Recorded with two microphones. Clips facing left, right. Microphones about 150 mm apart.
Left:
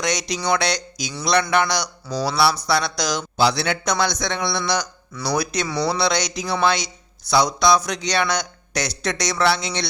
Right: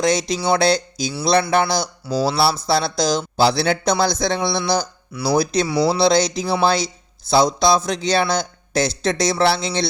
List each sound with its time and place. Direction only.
0.0 s speech: 30° right (ahead or behind)
2.1 s speech: centre (ahead or behind)
2.4 s speech: 30° right (ahead or behind)
5.6 s speech: 5° right (ahead or behind)
6.0 s speech: 30° right (ahead or behind)